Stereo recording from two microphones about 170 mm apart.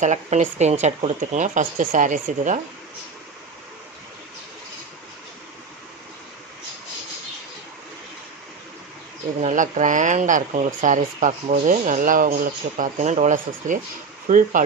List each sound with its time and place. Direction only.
0.0 s speech: 45° right (ahead or behind)
9.4 s speech: 45° right (ahead or behind)